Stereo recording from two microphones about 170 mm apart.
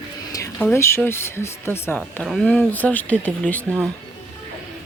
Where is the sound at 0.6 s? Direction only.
15° left (ahead or behind).